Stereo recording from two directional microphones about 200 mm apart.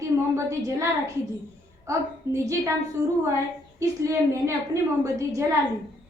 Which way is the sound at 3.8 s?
15° right (ahead or behind).